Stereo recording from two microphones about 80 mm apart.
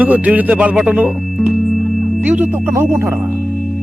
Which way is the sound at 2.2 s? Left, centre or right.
Centre.